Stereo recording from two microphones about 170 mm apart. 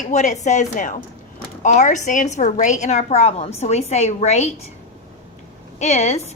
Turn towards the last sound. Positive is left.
turn(degrees=40)  # may be behind; listen again after turning